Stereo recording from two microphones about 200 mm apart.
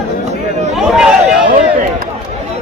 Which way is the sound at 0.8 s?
Centre (ahead or behind).